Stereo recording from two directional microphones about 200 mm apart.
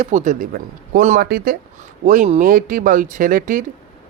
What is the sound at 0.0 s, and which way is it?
Speech, 35° right (ahead or behind).